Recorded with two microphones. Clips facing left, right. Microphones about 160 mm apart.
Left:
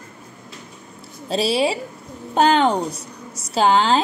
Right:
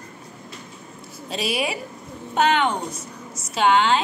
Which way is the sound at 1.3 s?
30° left (ahead or behind).